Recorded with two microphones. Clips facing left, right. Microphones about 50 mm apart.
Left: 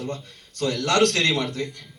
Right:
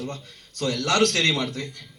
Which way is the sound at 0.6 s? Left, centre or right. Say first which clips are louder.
Left 1 dB; centre.